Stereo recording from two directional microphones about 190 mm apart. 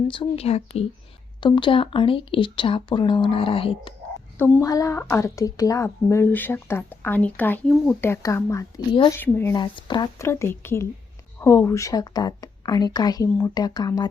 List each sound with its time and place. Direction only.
0.1 s a woman's voice: 30° left (ahead or behind)
4.4 s a woman's voice: 10° left (ahead or behind)
9.6 s a woman's voice: 25° left (ahead or behind)